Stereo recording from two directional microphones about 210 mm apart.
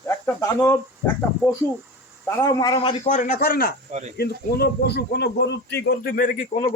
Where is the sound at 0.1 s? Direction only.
10° left (ahead or behind); by 6.5 s 40° left (ahead or behind).